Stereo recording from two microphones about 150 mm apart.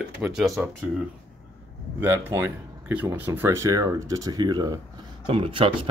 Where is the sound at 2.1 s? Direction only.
15° right (ahead or behind).